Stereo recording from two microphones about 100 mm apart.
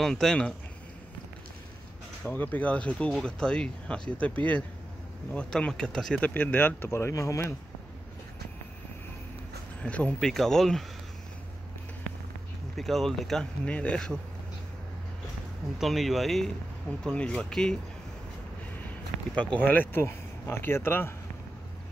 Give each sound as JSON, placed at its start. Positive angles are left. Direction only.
{"t": 0.0, "sound": "speech", "side_deg": 5}
{"t": 2.2, "sound": "speech", "side_deg": 20}
{"t": 6.2, "sound": "speech", "side_deg": 20}
{"t": 9.8, "sound": "speech", "side_deg": 15}
{"t": 12.7, "sound": "speech", "side_deg": 5}
{"t": 15.8, "sound": "speech", "side_deg": 0}
{"t": 18.9, "sound": "a sound", "side_deg": 15}
{"t": 19.7, "sound": "speech", "side_deg": 20}